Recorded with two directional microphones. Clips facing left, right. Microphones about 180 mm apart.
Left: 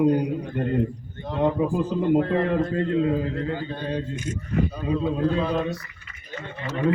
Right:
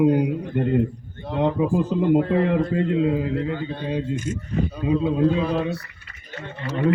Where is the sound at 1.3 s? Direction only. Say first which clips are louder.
Right 2 dB; 15° right (ahead or behind).